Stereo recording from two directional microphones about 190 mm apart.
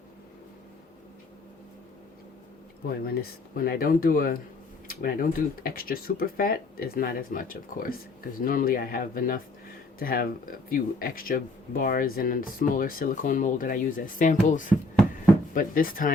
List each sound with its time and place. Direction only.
3.2 s speech: 50° left (ahead or behind)